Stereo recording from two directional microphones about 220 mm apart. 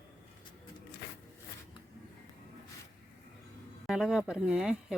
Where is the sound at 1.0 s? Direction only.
45° left (ahead or behind).